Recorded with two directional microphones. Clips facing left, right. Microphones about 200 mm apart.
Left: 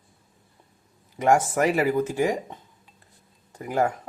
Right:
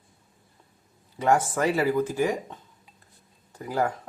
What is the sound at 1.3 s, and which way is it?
Speech, 25° left (ahead or behind).